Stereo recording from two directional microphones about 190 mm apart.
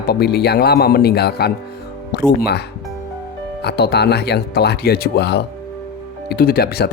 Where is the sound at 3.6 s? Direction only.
60° left (ahead or behind).